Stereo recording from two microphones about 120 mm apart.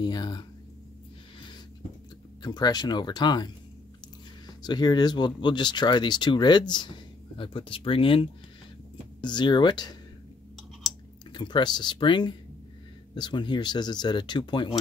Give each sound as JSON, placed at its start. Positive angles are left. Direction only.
{"t": 0.0, "sound": "speech", "side_deg": 35}
{"t": 2.4, "sound": "speech", "side_deg": 35}
{"t": 4.6, "sound": "speech", "side_deg": 35}
{"t": 11.3, "sound": "speech", "side_deg": 40}